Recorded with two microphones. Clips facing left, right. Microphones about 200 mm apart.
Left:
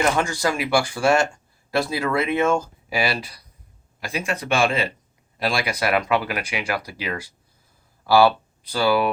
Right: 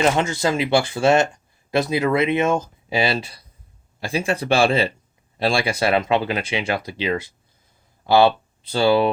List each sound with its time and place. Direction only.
0.0 s speech: 20° right (ahead or behind)